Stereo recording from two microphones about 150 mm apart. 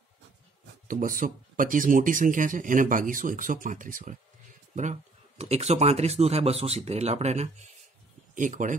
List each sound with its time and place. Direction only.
0.8 s speech: 65° right (ahead or behind)
5.4 s speech: 45° right (ahead or behind)
8.4 s speech: 60° right (ahead or behind)